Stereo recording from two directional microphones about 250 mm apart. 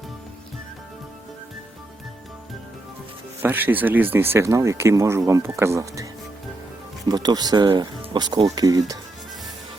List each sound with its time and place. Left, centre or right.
3.4 s speech: centre